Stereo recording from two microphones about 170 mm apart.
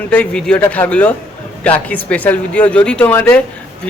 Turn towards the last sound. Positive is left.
turn(degrees=10)  # may be behind; listen again after turning